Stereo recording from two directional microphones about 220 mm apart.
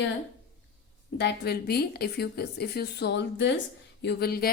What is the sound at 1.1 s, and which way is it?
A woman's voice, 50° left (ahead or behind).